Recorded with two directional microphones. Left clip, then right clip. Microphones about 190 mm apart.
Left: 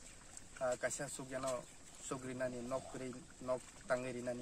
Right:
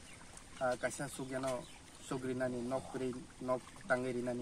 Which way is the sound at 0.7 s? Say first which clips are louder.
Right 2 dB; 40° left (ahead or behind).